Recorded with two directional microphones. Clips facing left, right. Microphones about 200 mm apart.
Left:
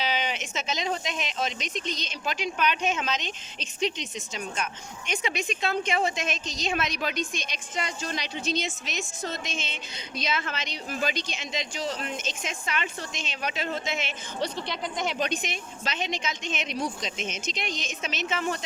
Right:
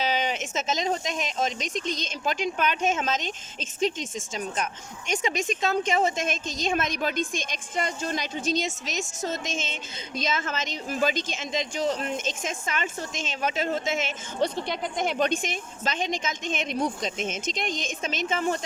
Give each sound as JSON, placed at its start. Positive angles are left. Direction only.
{"t": 0.0, "sound": "speech", "side_deg": -45}